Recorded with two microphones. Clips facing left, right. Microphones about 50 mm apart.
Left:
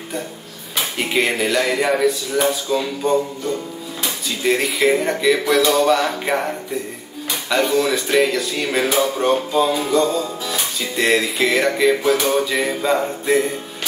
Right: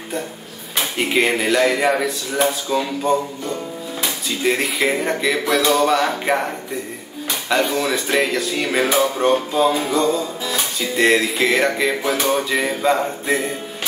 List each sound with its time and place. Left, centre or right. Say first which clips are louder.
0.9 s speech: right 1 dB; centre
7.4 s speech: left 2 dB; centre
10.4 s music: right 1 dB; centre
12.1 s speech: left 2 dB; centre